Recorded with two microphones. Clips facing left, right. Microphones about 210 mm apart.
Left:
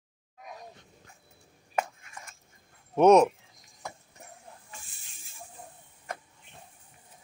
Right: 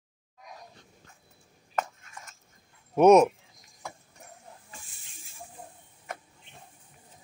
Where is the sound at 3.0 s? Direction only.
Centre (ahead or behind).